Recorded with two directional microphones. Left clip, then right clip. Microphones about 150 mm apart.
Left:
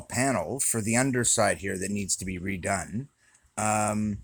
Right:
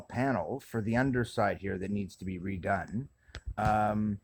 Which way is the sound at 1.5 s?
40° left (ahead or behind).